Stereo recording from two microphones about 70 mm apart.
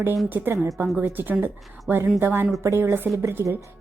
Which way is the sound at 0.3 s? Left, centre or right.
Right.